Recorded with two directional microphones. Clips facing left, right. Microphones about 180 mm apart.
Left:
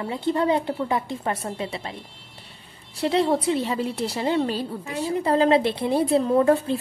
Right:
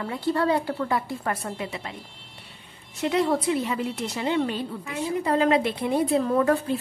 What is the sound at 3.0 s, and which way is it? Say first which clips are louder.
A woman's voice: left 2 dB; 30° left (ahead or behind).